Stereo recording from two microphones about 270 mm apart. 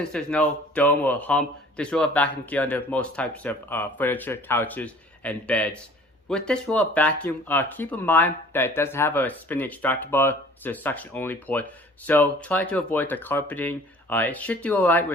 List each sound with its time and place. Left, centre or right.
0.1 s speech: centre